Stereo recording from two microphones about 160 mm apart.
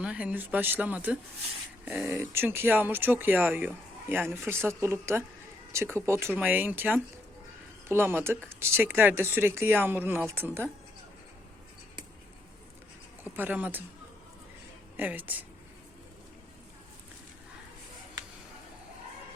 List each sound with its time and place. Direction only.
0.0 s speech: 5° right (ahead or behind)
13.3 s speech: 10° right (ahead or behind)
14.9 s speech: 10° right (ahead or behind)